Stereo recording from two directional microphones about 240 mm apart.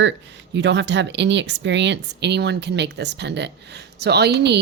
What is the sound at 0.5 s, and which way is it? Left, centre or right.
Speech, right.